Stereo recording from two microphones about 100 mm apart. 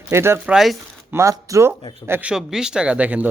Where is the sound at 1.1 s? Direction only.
30° right (ahead or behind).